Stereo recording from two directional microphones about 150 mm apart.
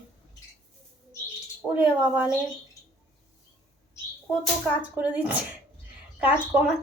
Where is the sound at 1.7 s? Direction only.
10° right (ahead or behind).